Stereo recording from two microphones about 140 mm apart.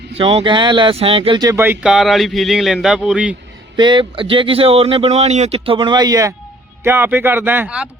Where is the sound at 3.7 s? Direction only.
35° right (ahead or behind).